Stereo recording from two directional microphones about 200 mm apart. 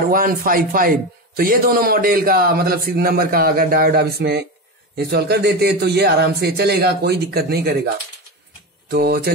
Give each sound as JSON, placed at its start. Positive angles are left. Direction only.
{"t": 0.1, "sound": "a man's voice", "side_deg": -45}